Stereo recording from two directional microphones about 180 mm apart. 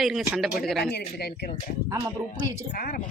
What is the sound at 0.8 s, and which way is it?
Speech, 65° left (ahead or behind).